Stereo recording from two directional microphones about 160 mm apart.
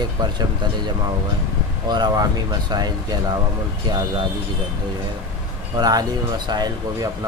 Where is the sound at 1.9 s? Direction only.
25° right (ahead or behind).